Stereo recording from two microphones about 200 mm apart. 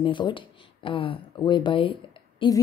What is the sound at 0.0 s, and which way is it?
Speech, 25° left (ahead or behind).